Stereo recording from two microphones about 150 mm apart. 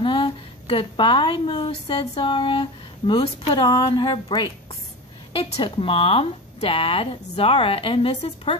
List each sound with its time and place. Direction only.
0.0 s a woman's voice: 35° left (ahead or behind)